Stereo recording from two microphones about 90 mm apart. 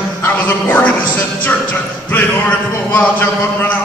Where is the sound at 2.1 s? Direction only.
20° left (ahead or behind).